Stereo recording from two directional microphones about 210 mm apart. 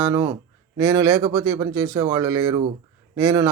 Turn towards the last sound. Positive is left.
turn(degrees=-15)  # may be behind; listen again after turning